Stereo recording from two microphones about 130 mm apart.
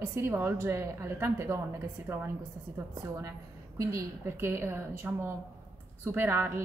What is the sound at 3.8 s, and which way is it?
A woman's voice, 20° right (ahead or behind).